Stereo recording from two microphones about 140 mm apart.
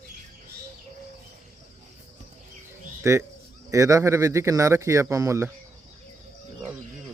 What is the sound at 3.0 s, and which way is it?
Speech, 20° right (ahead or behind).